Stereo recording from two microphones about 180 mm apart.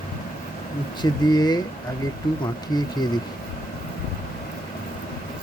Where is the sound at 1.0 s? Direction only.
25° left (ahead or behind).